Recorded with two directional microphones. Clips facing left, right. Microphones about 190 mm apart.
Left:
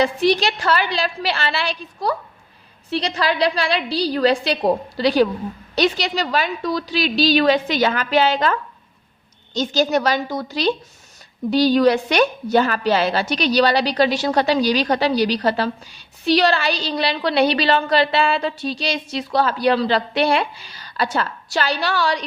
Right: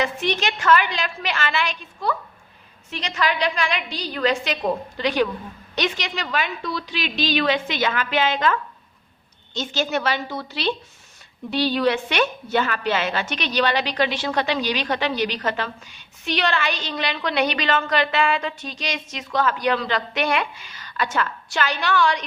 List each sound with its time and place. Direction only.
0.0 s a woman's voice: 35° left (ahead or behind)
9.6 s a woman's voice: 40° left (ahead or behind)